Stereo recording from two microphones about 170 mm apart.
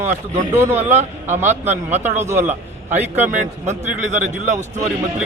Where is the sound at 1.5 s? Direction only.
40° right (ahead or behind).